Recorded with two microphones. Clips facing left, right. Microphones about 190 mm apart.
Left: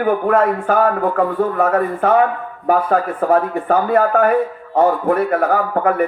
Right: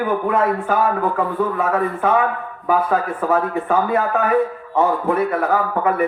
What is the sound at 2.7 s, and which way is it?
Speech, 55° left (ahead or behind).